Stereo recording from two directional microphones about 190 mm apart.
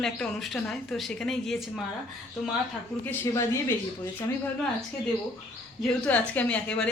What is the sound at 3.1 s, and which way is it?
Speech, 10° left (ahead or behind).